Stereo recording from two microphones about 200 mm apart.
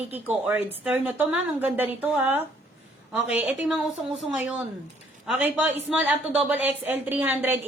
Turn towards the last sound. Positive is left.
turn(degrees=-10)  # may be behind; listen again after turning